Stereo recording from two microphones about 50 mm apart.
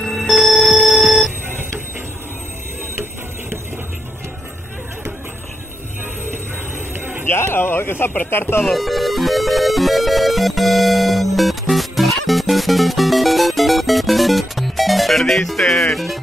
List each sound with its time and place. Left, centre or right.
0.0 s alarm clock: centre
7.2 s a sound: left
8.3 s speech: left
8.6 s music: centre